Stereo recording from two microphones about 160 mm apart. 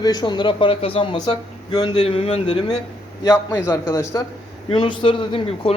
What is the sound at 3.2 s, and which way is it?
Speech, 15° left (ahead or behind).